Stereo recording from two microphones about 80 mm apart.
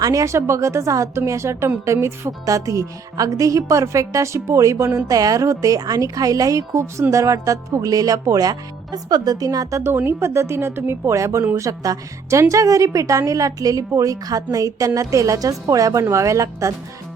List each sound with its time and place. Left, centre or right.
0.0 s a woman's voice: right
9.8 s speech: right
11.1 s a woman's voice: right